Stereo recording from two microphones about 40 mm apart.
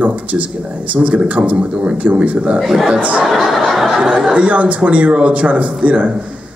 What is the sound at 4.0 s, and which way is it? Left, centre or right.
Speech, centre.